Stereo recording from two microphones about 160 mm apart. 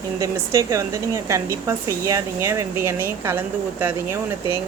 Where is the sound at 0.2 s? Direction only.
20° right (ahead or behind).